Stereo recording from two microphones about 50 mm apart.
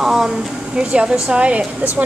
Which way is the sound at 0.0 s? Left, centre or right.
Centre.